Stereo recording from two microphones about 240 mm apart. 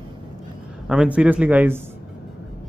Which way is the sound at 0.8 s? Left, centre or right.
Centre.